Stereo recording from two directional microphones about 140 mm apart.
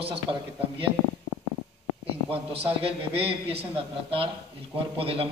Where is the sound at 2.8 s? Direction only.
45° right (ahead or behind).